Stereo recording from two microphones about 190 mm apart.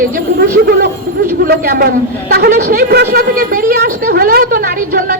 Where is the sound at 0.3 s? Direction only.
55° right (ahead or behind).